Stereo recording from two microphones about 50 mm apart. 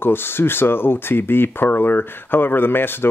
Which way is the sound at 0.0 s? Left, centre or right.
Left.